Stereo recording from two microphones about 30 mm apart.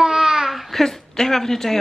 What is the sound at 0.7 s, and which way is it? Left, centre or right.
Speech, centre.